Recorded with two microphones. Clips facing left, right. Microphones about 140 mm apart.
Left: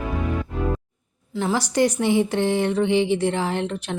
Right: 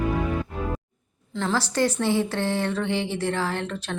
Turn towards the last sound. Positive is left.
turn(degrees=20)  # may be behind; listen again after turning